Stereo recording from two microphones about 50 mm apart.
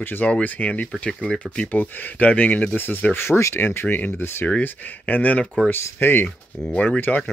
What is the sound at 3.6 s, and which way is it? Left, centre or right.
Speech, left.